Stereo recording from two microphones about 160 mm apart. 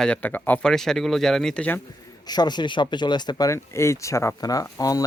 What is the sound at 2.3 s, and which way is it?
Speech, 25° left (ahead or behind).